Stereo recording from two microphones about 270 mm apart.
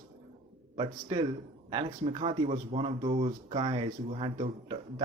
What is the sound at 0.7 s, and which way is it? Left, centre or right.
A man's voice, centre.